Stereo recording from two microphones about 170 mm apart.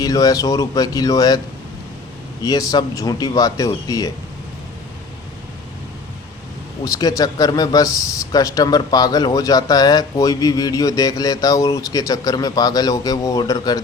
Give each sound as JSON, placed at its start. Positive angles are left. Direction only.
{"t": 0.0, "sound": "speech", "side_deg": 20}
{"t": 2.4, "sound": "speech", "side_deg": 20}
{"t": 6.8, "sound": "speech", "side_deg": 20}